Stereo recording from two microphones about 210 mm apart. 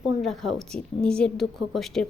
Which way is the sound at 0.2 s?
Centre (ahead or behind).